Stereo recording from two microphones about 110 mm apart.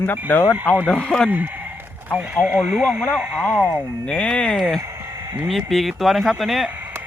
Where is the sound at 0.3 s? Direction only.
20° left (ahead or behind).